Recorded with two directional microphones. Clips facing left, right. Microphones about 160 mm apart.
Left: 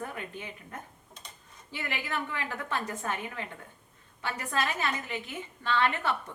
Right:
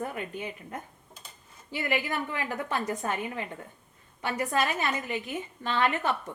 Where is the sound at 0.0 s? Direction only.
15° right (ahead or behind).